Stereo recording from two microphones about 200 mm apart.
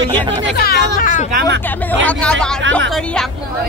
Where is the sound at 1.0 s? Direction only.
40° left (ahead or behind).